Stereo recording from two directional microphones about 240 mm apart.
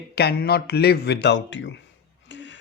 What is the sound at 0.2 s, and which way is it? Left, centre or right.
Speech, left.